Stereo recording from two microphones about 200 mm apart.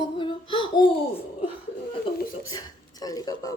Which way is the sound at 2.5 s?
20° left (ahead or behind).